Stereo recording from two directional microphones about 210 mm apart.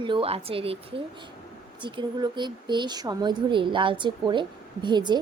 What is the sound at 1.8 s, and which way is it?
Speech, 20° right (ahead or behind).